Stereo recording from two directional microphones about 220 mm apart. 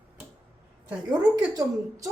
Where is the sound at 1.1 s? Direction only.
20° right (ahead or behind).